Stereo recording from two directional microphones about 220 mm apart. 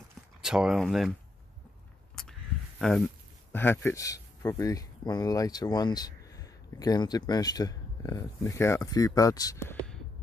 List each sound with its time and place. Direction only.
0.4 s speech: 5° right (ahead or behind)
2.8 s speech: centre (ahead or behind)